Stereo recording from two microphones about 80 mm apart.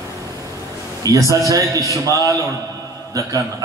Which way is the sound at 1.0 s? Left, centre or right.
Right.